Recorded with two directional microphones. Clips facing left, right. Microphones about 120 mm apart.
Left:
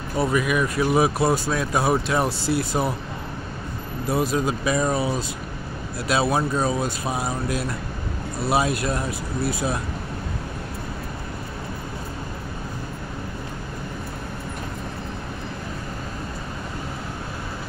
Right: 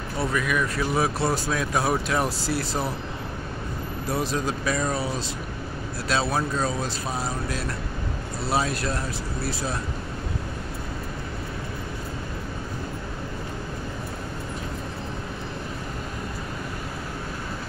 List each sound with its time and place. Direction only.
0.2 s speech: 10° left (ahead or behind)
1.5 s speech: 5° left (ahead or behind)
2.2 s speech: 40° right (ahead or behind)
4.3 s speech: 10° left (ahead or behind)